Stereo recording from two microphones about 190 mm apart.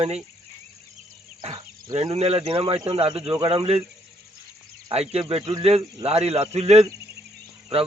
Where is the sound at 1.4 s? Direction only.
20° right (ahead or behind).